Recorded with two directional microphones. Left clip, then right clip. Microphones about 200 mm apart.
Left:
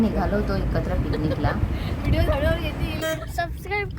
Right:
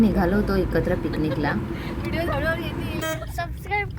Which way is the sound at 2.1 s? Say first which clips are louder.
Left 2 dB; 20° left (ahead or behind).